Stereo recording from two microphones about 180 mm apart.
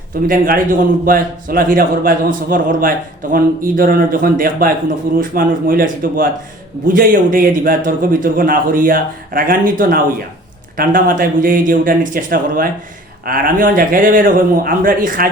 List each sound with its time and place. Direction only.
0.3 s a man's voice: 50° right (ahead or behind)